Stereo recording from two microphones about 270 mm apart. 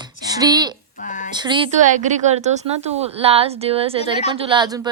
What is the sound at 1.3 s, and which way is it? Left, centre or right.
Speech, centre.